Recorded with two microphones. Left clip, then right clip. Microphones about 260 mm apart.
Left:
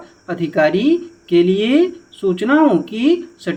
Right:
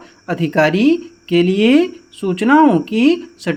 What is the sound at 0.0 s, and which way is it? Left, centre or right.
Speech, right.